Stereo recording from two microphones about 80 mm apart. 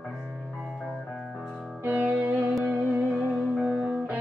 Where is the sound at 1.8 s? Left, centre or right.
Right.